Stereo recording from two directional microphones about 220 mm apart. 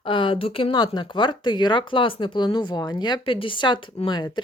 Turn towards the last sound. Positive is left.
turn(degrees=20)  # may be behind; listen again after turning